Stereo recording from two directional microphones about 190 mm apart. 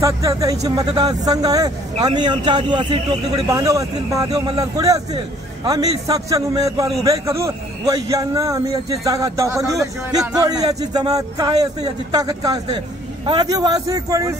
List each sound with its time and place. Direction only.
0.0 s a man's voice: 15° right (ahead or behind)